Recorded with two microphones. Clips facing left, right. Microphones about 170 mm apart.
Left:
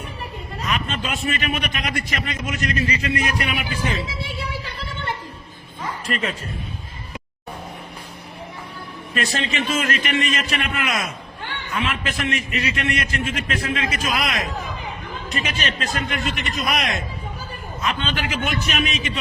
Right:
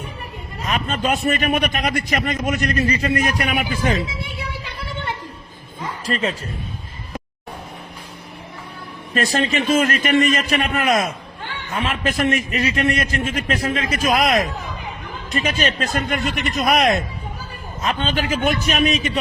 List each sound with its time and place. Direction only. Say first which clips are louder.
0.7 s a man's voice: right 5 dB; 45° right (ahead or behind)
6.1 s a man's voice: right 4 dB; 30° right (ahead or behind)
9.1 s a man's voice: right 5 dB; 45° right (ahead or behind)
9.8 s a man's voice: right 6 dB; 35° right (ahead or behind)
16.6 s a man's voice: right 9 dB; 35° right (ahead or behind)